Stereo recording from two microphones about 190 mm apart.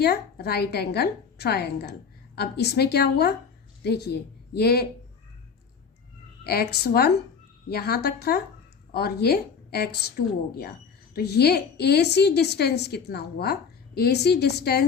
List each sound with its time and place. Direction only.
0.0 s a woman's voice: 55° left (ahead or behind)
6.4 s a woman's voice: 55° left (ahead or behind)